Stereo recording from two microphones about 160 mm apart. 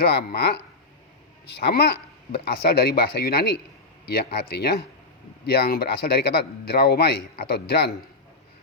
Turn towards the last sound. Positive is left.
turn(degrees=90)